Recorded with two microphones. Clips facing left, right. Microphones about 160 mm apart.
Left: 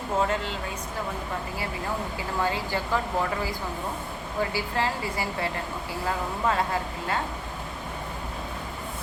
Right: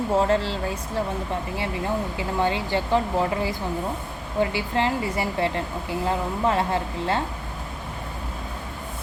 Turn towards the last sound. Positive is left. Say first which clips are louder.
# right 4 dB
turn(degrees=-30)  # may be behind; listen again after turning